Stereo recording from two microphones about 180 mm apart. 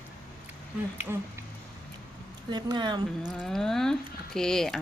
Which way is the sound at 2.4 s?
25° right (ahead or behind).